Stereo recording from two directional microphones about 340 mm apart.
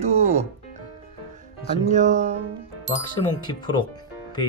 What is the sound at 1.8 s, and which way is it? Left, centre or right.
Speech, right.